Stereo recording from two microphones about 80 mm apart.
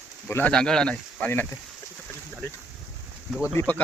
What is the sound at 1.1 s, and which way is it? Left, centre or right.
Speech, left.